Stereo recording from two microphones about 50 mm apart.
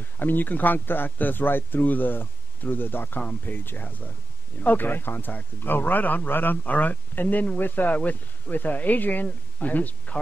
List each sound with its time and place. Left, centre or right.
0.2 s speech: left